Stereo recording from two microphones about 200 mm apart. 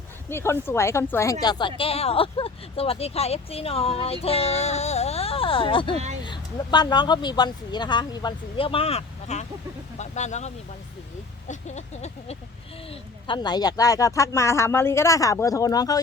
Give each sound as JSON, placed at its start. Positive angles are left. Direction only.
{"t": 0.3, "sound": "speech", "side_deg": 10}
{"t": 10.0, "sound": "a sound", "side_deg": 35}
{"t": 12.9, "sound": "speech", "side_deg": 25}